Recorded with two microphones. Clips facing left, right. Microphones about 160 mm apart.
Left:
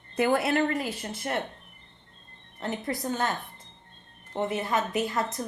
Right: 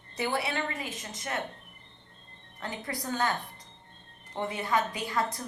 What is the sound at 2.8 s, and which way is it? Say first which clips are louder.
Speech: left 1 dB; 20° left (ahead or behind).